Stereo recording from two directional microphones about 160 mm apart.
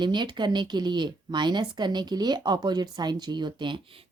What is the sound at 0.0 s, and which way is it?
A woman's voice, 30° right (ahead or behind).